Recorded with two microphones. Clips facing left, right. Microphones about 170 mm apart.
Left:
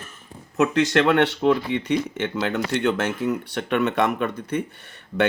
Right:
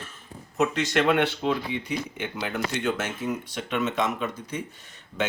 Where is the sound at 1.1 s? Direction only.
70° left (ahead or behind).